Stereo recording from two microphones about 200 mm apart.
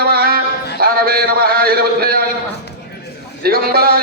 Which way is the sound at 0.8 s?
50° right (ahead or behind).